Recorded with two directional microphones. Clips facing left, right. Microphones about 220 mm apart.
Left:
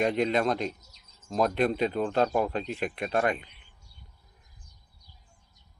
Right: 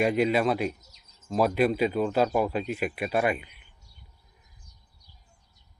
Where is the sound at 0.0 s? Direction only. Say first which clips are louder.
Right 2 dB; 5° right (ahead or behind).